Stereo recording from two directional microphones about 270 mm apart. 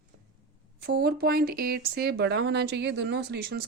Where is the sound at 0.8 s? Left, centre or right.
Right.